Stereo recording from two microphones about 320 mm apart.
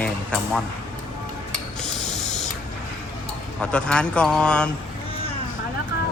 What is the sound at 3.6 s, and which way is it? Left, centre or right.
A man's voice, centre.